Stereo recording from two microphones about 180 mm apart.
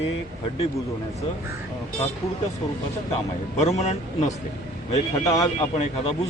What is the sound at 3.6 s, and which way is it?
Speech, 40° left (ahead or behind).